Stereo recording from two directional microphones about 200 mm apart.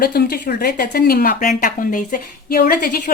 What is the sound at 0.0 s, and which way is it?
Speech, 50° left (ahead or behind).